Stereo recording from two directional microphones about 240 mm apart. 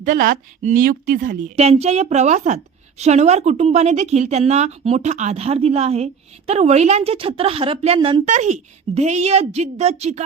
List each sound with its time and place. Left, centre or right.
0.0 s a woman's voice: right